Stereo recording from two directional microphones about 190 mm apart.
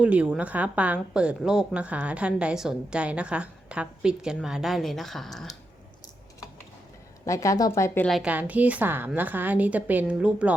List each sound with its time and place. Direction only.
0.0 s a woman's voice: 5° right (ahead or behind)
7.3 s speech: 15° left (ahead or behind)
8.1 s a woman's voice: 5° right (ahead or behind)